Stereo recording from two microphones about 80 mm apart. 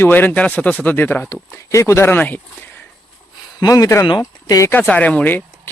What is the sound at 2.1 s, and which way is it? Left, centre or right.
Speech, left.